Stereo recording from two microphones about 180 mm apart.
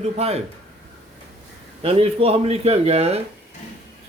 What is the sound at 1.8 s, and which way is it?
A man's voice, 30° right (ahead or behind).